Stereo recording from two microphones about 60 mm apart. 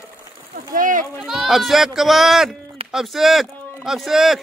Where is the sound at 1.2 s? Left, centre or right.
Centre.